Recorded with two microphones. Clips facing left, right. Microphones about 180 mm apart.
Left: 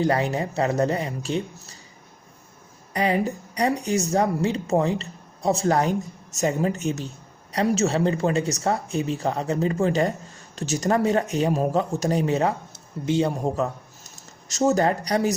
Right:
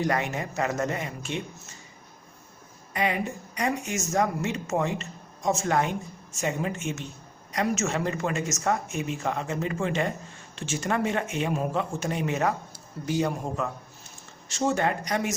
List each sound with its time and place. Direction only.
0.0 s speech: 30° left (ahead or behind)
2.9 s speech: 35° left (ahead or behind)